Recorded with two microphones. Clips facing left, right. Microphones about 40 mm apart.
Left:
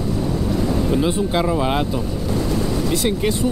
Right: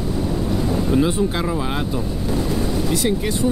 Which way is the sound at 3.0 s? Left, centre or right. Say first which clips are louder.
Even; left.